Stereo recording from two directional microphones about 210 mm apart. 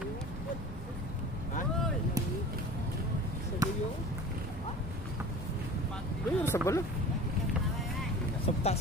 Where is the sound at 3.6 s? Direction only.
15° right (ahead or behind).